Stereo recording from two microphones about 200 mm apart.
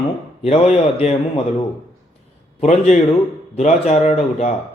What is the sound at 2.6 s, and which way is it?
A man's voice, 35° left (ahead or behind).